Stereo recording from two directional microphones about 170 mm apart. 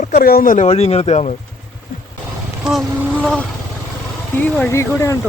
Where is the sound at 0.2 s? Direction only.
60° left (ahead or behind); by 1.3 s 40° left (ahead or behind).